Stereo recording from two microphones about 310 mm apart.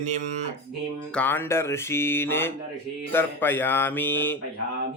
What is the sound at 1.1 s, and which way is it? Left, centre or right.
Mantra, centre.